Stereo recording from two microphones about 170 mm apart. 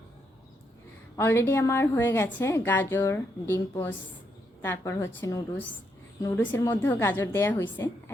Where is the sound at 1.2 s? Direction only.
15° left (ahead or behind).